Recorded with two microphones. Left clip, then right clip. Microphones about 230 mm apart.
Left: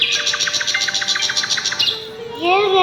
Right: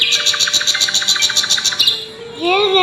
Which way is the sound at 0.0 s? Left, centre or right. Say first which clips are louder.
Right 3 dB; right.